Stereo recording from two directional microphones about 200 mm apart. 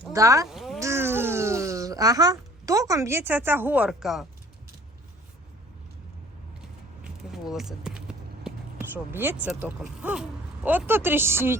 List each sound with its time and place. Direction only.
0.1 s speech: 15° right (ahead or behind)
0.5 s a sound: centre (ahead or behind)
0.8 s speech: 15° right (ahead or behind)
7.0 s speech: centre (ahead or behind)